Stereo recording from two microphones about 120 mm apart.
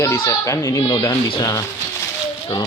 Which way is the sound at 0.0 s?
25° left (ahead or behind).